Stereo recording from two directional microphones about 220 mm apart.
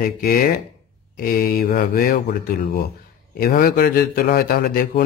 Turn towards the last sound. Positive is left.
turn(degrees=45)  # may be behind; listen again after turning